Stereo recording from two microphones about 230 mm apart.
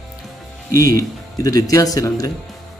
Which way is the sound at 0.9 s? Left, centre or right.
Centre.